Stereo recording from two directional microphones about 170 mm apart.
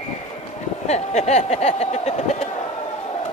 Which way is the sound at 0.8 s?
40° left (ahead or behind).